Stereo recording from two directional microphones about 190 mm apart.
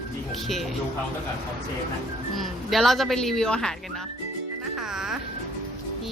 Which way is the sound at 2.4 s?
Centre (ahead or behind).